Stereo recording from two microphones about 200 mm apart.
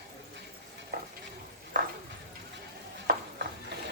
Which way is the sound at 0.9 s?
50° right (ahead or behind).